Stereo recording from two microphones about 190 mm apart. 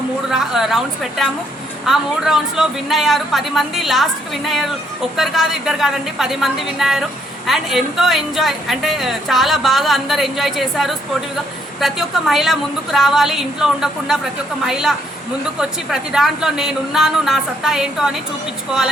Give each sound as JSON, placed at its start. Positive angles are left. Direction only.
{"t": 0.3, "sound": "a woman's voice", "side_deg": 0}
{"t": 1.9, "sound": "a woman's voice", "side_deg": 0}